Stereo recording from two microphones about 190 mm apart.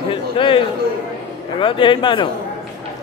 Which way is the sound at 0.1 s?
25° left (ahead or behind).